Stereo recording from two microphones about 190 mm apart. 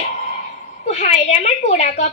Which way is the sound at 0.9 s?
35° left (ahead or behind).